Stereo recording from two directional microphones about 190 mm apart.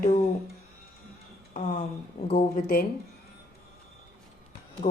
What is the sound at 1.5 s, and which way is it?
Speech, 40° left (ahead or behind).